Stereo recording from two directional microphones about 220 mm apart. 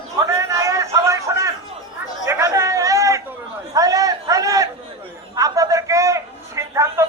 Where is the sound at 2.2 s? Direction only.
15° right (ahead or behind).